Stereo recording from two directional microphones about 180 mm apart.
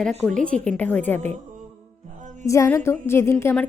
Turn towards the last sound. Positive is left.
turn(degrees=15)  # may be behind; listen again after turning